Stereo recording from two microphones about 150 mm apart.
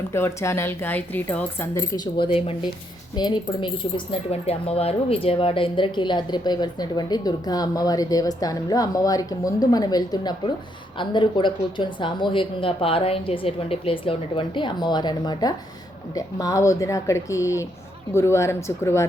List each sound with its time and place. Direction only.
0.1 s speech: 20° left (ahead or behind)